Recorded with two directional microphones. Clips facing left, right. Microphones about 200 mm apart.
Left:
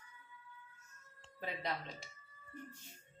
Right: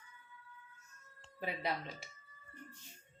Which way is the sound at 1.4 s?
10° right (ahead or behind).